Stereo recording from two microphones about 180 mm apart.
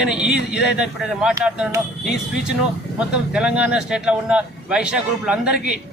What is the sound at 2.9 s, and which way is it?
Speech, 5° right (ahead or behind).